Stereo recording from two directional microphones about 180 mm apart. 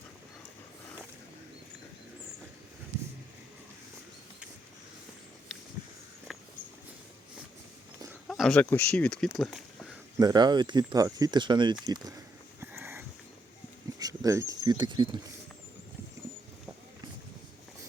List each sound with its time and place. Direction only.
6.3 s walk: centre (ahead or behind)
8.3 s speech: centre (ahead or behind)
10.2 s speech: 20° right (ahead or behind)